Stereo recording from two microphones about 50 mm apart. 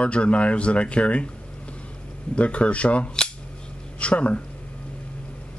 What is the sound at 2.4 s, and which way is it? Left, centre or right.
Speech, left.